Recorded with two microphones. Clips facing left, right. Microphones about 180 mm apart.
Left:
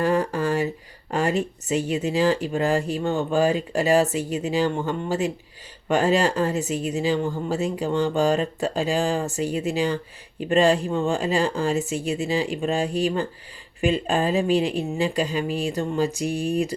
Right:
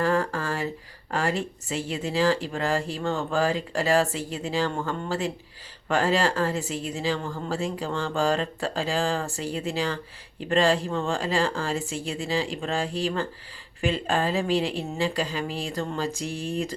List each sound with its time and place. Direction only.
0.0 s a woman's voice: 20° left (ahead or behind)